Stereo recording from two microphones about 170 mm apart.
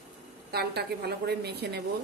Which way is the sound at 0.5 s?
70° right (ahead or behind).